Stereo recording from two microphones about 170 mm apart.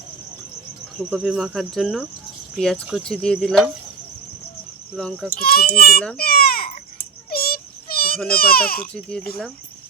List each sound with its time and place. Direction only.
0.9 s speech: 5° right (ahead or behind)
4.9 s speech: 5° left (ahead or behind)
5.3 s a child's voice: 60° left (ahead or behind)
6.1 s baby cry: 60° left (ahead or behind)
7.3 s a sound: 60° left (ahead or behind)
8.3 s a child's voice: 60° left (ahead or behind)
8.8 s speech: 5° left (ahead or behind)